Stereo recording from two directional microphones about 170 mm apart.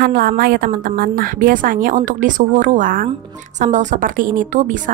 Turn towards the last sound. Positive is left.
turn(degrees=-50)  # may be behind; listen again after turning